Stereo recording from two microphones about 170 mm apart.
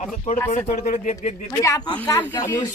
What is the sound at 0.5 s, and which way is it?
Speech, 40° left (ahead or behind).